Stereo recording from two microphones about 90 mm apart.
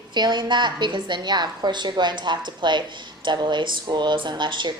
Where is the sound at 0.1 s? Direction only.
55° right (ahead or behind).